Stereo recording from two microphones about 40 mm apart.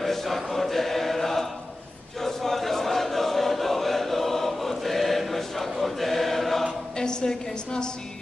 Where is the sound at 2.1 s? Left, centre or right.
Centre.